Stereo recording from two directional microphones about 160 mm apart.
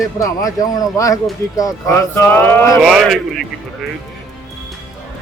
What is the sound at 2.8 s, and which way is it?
Speech, centre (ahead or behind).